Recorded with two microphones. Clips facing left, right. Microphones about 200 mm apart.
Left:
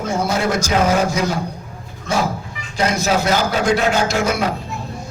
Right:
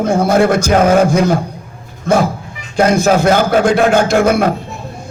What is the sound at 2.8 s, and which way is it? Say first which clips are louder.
A man's voice: right 7 dB; 55° right (ahead or behind).